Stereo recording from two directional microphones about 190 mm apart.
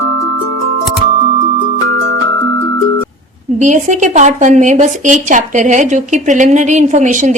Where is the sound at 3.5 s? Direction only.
40° right (ahead or behind).